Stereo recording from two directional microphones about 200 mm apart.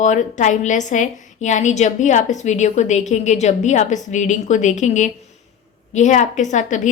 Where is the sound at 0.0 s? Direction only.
35° left (ahead or behind).